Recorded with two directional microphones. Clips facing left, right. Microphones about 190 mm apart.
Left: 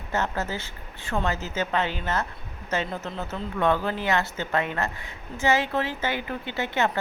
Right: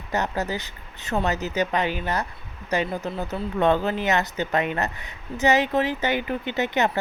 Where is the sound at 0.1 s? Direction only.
15° right (ahead or behind).